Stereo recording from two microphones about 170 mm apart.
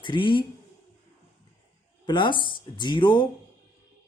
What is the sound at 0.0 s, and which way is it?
Speech, 30° left (ahead or behind).